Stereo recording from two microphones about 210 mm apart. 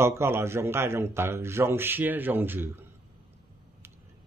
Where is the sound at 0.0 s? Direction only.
10° right (ahead or behind).